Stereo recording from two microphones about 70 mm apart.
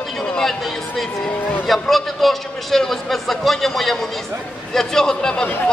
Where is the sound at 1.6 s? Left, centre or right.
Centre.